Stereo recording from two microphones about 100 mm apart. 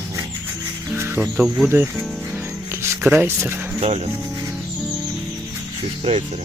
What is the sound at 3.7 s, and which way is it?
Speech, 90° right.